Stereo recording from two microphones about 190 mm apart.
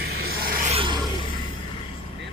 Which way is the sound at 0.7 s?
25° right (ahead or behind).